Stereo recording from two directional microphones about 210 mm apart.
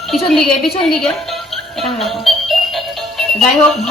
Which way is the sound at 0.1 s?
Centre (ahead or behind).